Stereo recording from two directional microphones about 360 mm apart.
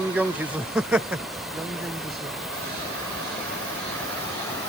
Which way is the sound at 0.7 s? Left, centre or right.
Centre.